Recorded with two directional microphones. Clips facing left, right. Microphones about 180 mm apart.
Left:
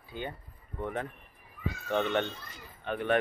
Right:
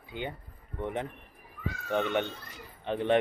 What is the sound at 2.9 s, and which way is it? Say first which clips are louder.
Speech: right 2 dB; 25° right (ahead or behind).